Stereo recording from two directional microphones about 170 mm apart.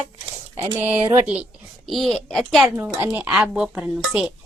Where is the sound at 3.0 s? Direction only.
10° right (ahead or behind).